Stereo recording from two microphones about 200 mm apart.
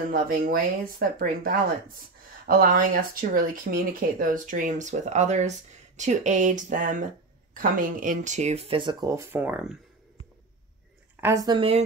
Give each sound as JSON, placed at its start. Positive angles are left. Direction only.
{"t": 0.3, "sound": "speech", "side_deg": -45}
{"t": 11.1, "sound": "speech", "side_deg": -15}